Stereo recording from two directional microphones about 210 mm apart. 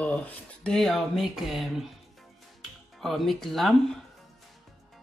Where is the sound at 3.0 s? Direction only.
Centre (ahead or behind).